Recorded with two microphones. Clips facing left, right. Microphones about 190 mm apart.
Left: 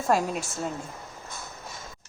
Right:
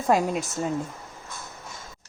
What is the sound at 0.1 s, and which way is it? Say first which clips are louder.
Speech: right 3 dB; 15° right (ahead or behind).